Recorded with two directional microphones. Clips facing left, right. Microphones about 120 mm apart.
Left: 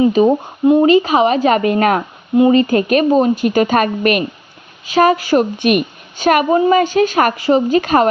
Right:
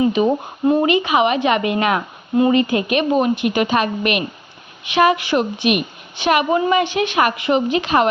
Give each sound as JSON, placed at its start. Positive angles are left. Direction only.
{"t": 0.0, "sound": "a woman's voice", "side_deg": 35}